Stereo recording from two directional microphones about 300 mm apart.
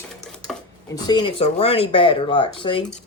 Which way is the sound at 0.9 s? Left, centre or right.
Centre.